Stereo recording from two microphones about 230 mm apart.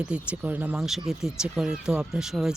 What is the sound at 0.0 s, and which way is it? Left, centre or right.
Speech, centre.